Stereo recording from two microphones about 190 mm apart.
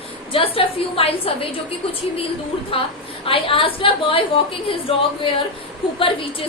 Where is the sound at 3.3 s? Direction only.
30° left (ahead or behind).